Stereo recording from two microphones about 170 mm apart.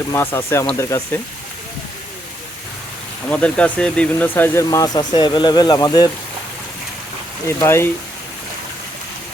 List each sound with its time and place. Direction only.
0.1 s speech: 15° left (ahead or behind)
3.2 s speech: 5° left (ahead or behind); by 6.1 s 25° left (ahead or behind)
7.4 s speech: 15° left (ahead or behind)